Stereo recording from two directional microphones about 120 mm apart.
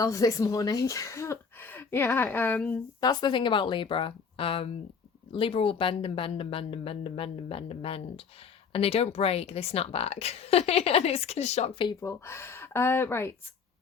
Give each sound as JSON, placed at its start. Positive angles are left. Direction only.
{"t": 0.0, "sound": "speech", "side_deg": 30}
{"t": 3.0, "sound": "speech", "side_deg": 35}
{"t": 11.9, "sound": "speech", "side_deg": 20}